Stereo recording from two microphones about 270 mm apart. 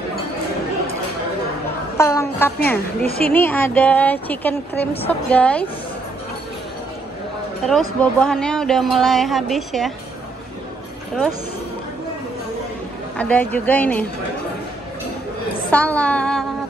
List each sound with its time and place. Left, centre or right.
2.0 s a woman's voice: centre
3.0 s a woman's voice: left
3.3 s a woman's voice: centre
8.0 s a woman's voice: centre
13.2 s a woman's voice: centre
15.7 s a woman's voice: centre